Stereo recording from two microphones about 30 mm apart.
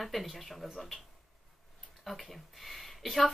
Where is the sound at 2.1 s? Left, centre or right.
Centre.